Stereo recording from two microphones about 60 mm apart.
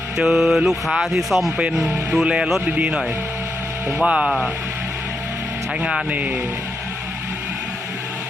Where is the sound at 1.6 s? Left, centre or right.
Centre.